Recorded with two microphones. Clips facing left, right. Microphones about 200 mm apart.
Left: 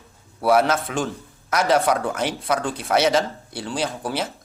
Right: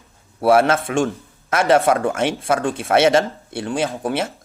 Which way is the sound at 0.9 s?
70° right (ahead or behind).